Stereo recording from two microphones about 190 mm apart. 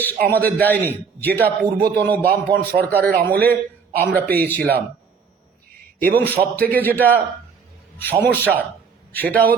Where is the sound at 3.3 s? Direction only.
10° left (ahead or behind).